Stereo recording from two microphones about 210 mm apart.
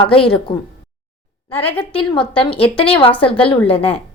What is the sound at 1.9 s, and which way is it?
A woman's voice, 25° left (ahead or behind).